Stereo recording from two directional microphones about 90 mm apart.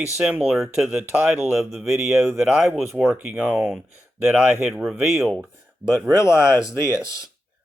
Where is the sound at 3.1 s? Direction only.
15° right (ahead or behind).